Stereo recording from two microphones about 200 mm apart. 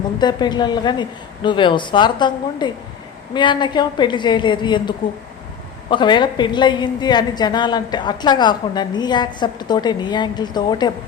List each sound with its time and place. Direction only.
0.2 s a woman's voice: 20° left (ahead or behind)